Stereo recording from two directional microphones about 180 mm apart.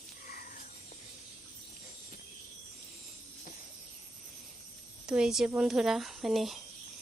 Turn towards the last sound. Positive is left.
turn(degrees=0)  # may be behind; listen again after turning